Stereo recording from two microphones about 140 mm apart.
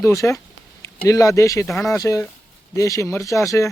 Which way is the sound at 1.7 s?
Centre (ahead or behind).